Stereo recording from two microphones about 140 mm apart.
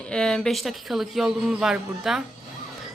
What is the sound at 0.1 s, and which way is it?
Speech, 5° left (ahead or behind).